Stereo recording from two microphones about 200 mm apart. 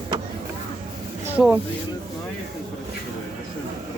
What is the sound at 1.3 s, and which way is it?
Speech, 5° right (ahead or behind).